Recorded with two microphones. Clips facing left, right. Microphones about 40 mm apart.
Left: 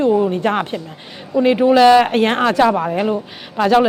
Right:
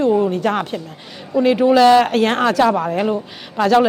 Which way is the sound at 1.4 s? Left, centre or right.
Centre.